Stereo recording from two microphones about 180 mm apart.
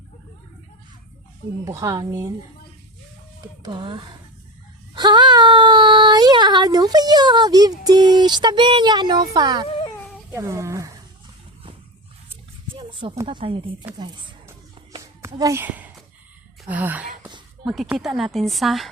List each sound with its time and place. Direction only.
1.6 s speech: 20° right (ahead or behind)
3.4 s speech: 25° right (ahead or behind)
9.6 s cat: 30° left (ahead or behind)
10.3 s speech: 15° right (ahead or behind)
12.9 s speech: 30° right (ahead or behind)
15.2 s a sound: 15° right (ahead or behind)
16.6 s speech: 10° right (ahead or behind)